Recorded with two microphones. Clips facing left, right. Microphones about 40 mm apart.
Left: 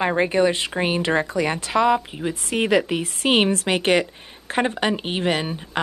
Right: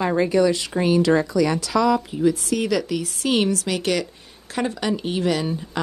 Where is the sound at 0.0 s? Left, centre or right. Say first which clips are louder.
Even; left.